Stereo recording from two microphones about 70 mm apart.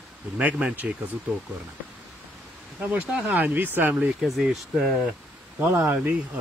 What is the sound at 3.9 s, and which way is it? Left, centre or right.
Speech, centre.